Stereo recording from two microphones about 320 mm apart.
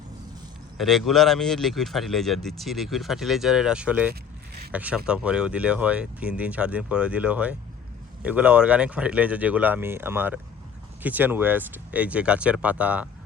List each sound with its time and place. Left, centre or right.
0.8 s speech: centre
4.1 s a sound: right
4.7 s speech: centre